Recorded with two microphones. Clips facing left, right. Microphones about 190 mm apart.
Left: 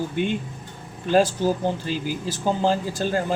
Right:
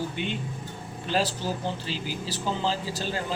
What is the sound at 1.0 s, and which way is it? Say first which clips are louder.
Speech: left 8 dB; 50° left (ahead or behind).